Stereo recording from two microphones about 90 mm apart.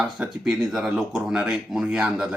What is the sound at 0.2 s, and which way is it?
Speech, 5° right (ahead or behind).